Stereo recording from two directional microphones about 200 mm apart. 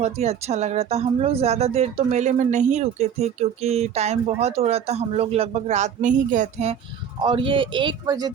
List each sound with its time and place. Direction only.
0.0 s speech: 35° right (ahead or behind)
7.2 s speech: 25° right (ahead or behind)